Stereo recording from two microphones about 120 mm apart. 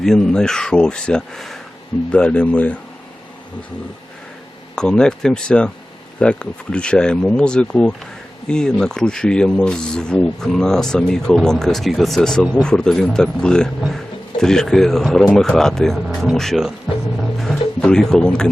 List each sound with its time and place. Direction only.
0.0 s speech: 5° left (ahead or behind)
4.7 s speech: 5° left (ahead or behind)